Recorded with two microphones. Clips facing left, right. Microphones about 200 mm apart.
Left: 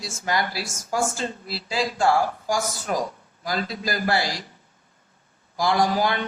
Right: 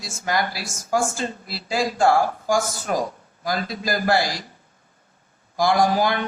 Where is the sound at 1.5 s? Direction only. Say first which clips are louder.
Right 3 dB; 50° right (ahead or behind).